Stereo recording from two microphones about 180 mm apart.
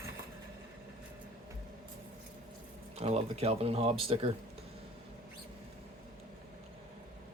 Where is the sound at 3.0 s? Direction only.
35° right (ahead or behind).